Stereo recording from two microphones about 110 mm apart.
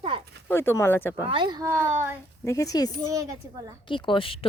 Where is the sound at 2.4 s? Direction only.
30° left (ahead or behind).